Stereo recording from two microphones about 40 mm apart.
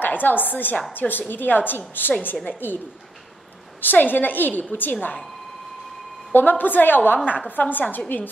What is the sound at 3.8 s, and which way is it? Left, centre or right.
A woman's voice, left.